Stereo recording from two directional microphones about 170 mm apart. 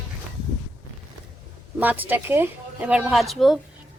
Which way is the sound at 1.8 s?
10° right (ahead or behind).